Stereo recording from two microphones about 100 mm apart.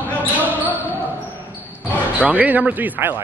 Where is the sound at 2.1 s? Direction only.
15° right (ahead or behind).